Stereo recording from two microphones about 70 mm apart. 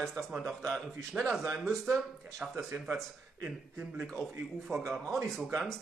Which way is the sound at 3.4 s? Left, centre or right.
Right.